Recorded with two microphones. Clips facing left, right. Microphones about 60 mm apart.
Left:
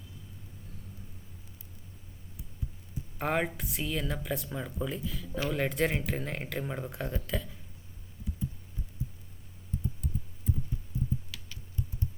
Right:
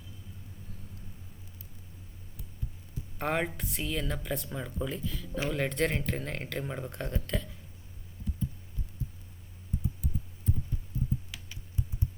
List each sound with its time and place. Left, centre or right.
3.2 s speech: centre
11.3 s typing: centre